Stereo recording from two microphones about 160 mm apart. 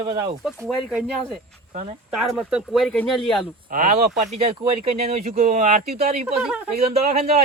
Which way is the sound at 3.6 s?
55° right (ahead or behind).